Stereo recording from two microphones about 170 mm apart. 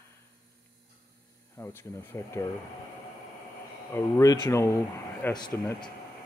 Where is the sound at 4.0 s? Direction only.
15° left (ahead or behind).